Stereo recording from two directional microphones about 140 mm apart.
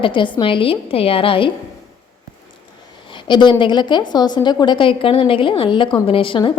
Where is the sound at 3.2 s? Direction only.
35° left (ahead or behind).